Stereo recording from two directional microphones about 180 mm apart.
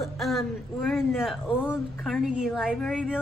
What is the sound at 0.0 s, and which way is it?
A woman's voice, centre (ahead or behind).